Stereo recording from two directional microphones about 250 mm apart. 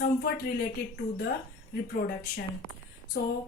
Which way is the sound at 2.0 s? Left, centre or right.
Left.